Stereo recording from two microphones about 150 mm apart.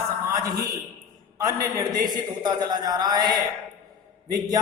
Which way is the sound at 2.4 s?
30° right (ahead or behind).